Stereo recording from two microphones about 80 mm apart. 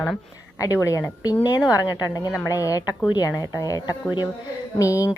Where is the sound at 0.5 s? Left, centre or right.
Left.